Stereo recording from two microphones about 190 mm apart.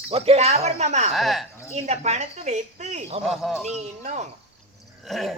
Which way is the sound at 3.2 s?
Centre (ahead or behind).